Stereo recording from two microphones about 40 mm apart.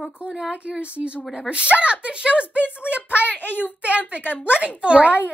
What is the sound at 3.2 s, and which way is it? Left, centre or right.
A child's voice, left.